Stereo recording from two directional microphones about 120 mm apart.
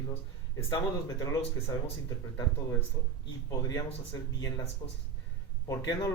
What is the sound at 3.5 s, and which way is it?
A man's voice, 30° left (ahead or behind).